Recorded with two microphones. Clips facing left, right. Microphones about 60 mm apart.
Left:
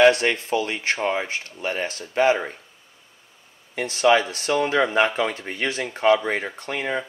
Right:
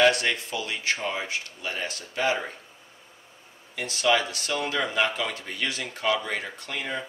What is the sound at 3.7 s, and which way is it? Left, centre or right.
Speech, left.